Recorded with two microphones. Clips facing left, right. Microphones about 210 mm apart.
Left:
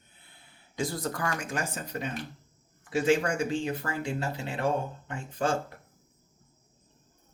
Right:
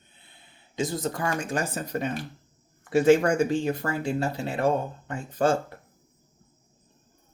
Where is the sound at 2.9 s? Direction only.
55° right (ahead or behind).